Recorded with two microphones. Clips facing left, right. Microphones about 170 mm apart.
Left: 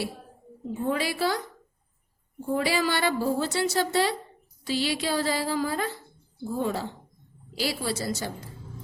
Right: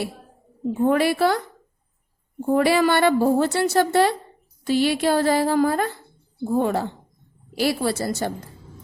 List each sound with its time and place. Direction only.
0.7 s a woman's voice: 60° right (ahead or behind)
2.5 s a woman's voice: 55° right (ahead or behind)